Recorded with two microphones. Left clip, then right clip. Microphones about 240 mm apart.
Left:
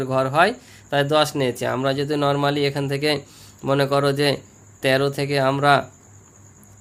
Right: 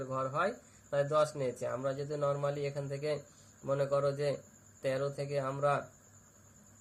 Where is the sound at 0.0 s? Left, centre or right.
Left.